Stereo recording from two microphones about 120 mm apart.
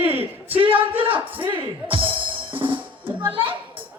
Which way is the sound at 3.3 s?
45° right (ahead or behind).